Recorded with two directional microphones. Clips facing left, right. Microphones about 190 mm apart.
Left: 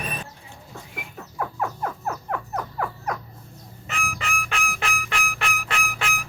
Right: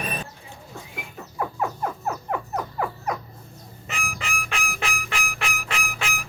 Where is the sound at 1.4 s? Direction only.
5° right (ahead or behind).